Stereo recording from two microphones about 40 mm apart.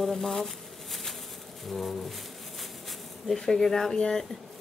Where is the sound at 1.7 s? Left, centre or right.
Centre.